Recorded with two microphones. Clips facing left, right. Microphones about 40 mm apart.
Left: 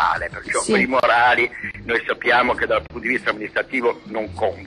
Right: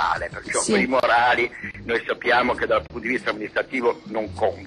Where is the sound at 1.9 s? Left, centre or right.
Centre.